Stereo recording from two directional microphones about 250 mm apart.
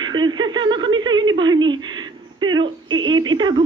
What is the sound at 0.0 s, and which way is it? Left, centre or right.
A woman's voice, centre.